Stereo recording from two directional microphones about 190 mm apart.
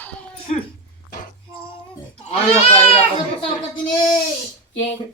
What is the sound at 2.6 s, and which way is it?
Speech, 30° left (ahead or behind).